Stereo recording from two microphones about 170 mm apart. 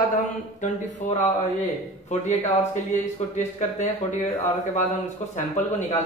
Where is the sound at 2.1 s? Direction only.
45° left (ahead or behind).